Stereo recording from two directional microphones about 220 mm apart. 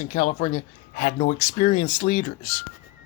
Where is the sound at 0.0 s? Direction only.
35° left (ahead or behind).